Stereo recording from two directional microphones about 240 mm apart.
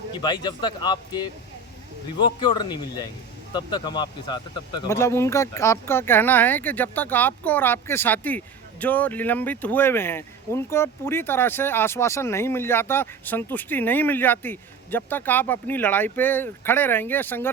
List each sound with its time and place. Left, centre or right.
0.1 s a man's voice: centre